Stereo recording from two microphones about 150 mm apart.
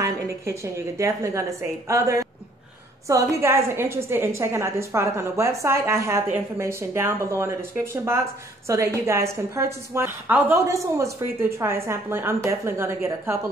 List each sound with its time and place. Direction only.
0.0 s a woman's voice: 20° right (ahead or behind)